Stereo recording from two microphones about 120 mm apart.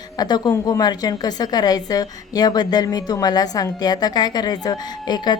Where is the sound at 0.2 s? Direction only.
35° left (ahead or behind).